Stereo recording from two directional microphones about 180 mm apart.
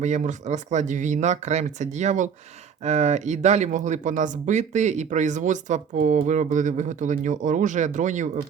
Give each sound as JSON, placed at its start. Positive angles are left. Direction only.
{"t": 0.0, "sound": "speech", "side_deg": -40}